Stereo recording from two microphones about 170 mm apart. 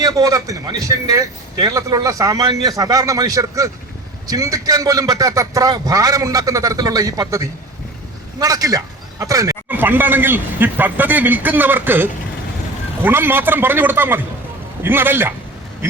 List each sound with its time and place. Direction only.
0.0 s a man's voice: 20° right (ahead or behind)